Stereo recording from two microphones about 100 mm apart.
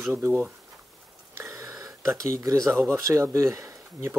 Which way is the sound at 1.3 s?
30° right (ahead or behind).